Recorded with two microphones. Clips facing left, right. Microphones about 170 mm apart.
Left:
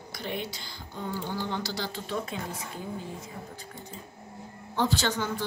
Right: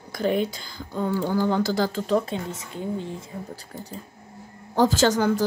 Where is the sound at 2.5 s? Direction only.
25° right (ahead or behind).